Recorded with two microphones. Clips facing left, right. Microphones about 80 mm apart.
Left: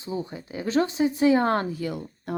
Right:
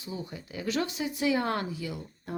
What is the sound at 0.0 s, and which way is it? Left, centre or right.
Speech, left.